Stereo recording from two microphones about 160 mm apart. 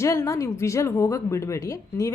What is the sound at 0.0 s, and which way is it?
A woman's voice, 20° left (ahead or behind).